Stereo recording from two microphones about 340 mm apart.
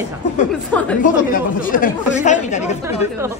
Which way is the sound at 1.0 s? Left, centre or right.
Left.